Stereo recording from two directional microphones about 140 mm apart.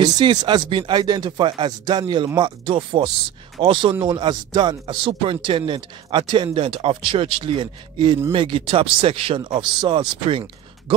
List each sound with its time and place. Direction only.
0.0 s speech: 30° right (ahead or behind)